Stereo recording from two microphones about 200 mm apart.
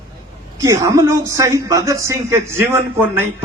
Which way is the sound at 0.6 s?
15° right (ahead or behind).